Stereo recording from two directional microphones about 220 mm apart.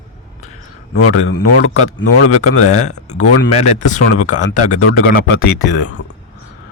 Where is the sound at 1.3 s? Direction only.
40° left (ahead or behind).